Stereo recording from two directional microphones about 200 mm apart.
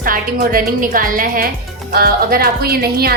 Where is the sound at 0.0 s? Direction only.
45° right (ahead or behind).